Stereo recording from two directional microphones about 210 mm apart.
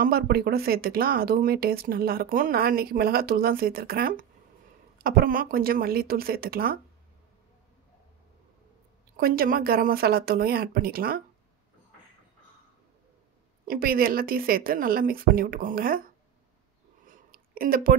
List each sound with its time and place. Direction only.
0.0 s speech: 45° right (ahead or behind)
9.1 s speech: 45° right (ahead or behind)
13.7 s speech: 45° right (ahead or behind)
17.0 s a sound: 40° right (ahead or behind)